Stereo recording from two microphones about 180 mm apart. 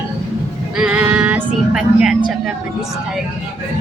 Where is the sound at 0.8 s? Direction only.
5° right (ahead or behind).